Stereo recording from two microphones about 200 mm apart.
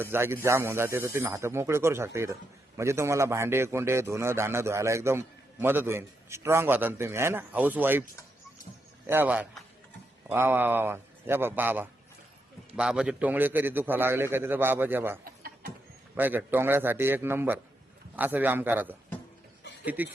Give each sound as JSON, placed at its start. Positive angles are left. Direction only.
{"t": 0.0, "sound": "speech", "side_deg": -10}
{"t": 9.0, "sound": "a man's voice", "side_deg": -10}
{"t": 15.2, "sound": "a sound", "side_deg": -45}
{"t": 16.1, "sound": "speech", "side_deg": -10}